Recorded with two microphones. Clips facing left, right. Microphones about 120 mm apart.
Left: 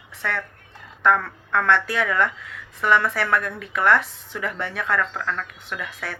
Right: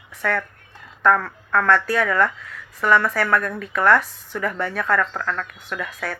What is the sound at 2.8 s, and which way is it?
Speech, 40° right (ahead or behind).